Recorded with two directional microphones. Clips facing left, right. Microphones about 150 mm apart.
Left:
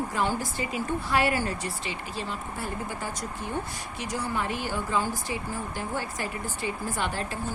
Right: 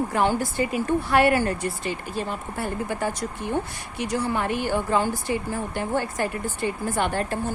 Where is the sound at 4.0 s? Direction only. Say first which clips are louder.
Right 6 dB; 60° right (ahead or behind).